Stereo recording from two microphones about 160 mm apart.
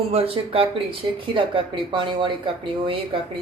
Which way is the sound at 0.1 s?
35° right (ahead or behind).